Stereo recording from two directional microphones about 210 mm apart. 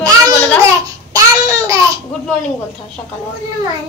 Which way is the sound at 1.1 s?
15° right (ahead or behind).